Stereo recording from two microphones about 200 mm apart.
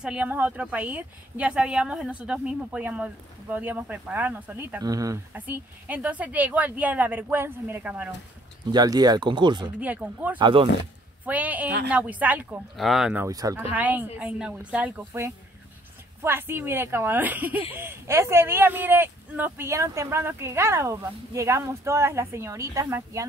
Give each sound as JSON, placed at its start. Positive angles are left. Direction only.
{"t": 0.0, "sound": "speech", "side_deg": -5}
{"t": 8.7, "sound": "speech", "side_deg": -20}
{"t": 9.8, "sound": "speech", "side_deg": -10}
{"t": 10.4, "sound": "speech", "side_deg": -25}
{"t": 11.2, "sound": "speech", "side_deg": -10}